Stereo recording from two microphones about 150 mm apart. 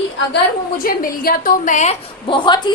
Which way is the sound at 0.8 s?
75° left (ahead or behind).